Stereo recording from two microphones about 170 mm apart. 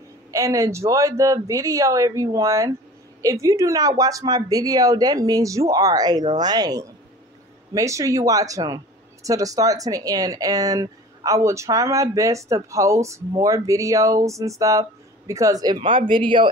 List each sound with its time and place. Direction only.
0.3 s speech: 20° right (ahead or behind)